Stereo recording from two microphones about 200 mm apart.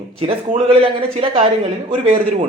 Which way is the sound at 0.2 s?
30° right (ahead or behind).